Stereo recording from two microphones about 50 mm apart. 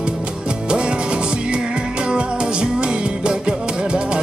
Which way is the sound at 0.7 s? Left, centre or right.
Centre.